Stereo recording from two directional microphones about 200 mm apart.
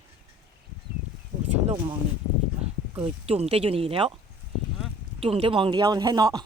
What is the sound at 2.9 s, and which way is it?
Speech, 25° right (ahead or behind).